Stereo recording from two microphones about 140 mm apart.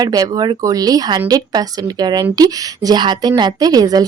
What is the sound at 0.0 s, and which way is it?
A woman's voice, 25° right (ahead or behind).